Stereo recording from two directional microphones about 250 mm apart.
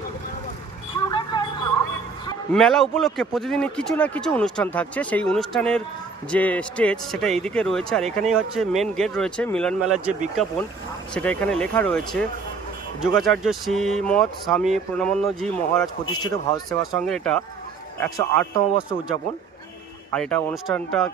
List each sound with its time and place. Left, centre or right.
1.0 s vehicle: centre
2.5 s speech: centre
11.1 s speech: centre
16.1 s a man's voice: centre
16.9 s a man's voice: centre
20.1 s speech: centre